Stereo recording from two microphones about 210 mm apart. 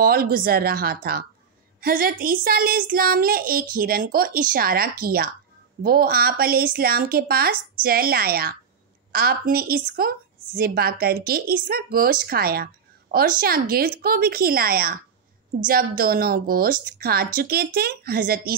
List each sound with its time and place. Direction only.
0.0 s child singing: 45° right (ahead or behind)